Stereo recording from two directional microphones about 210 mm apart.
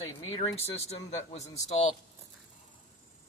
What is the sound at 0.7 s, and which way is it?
A man's voice, 30° left (ahead or behind).